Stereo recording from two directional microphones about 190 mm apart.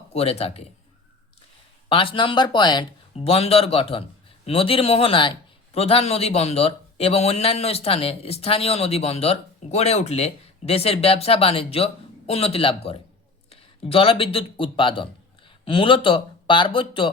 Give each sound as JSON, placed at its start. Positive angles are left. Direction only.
{"t": 0.1, "sound": "a man's voice", "side_deg": 30}
{"t": 1.9, "sound": "a man's voice", "side_deg": 30}